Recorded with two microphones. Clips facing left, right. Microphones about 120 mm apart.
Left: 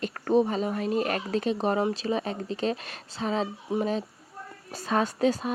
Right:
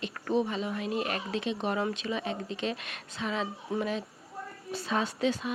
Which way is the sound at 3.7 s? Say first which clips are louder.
Left 4 dB; 20° left (ahead or behind).